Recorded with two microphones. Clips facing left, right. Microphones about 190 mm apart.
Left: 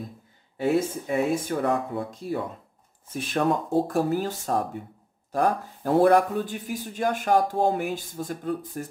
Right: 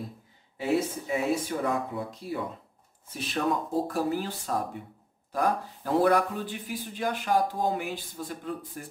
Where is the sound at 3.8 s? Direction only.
45° left (ahead or behind).